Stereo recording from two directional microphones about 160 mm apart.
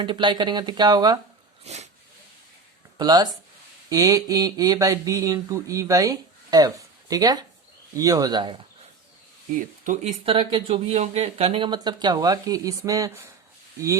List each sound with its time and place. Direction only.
0.0 s speech: 30° right (ahead or behind)
1.6 s speech: 45° right (ahead or behind)
3.0 s speech: 25° right (ahead or behind)
9.8 s speech: 50° right (ahead or behind)
10.2 s speech: 35° right (ahead or behind); by 13.3 s 20° right (ahead or behind)